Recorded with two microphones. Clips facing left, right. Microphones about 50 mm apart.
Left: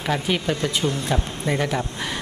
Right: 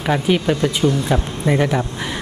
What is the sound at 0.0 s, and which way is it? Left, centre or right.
A man's voice, centre.